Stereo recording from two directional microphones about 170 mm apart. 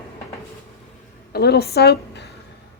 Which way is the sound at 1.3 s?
70° left (ahead or behind).